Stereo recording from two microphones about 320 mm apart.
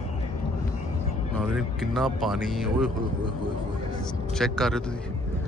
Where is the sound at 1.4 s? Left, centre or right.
Centre.